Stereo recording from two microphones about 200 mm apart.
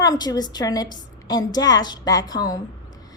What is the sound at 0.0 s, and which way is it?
Speech, 20° left (ahead or behind).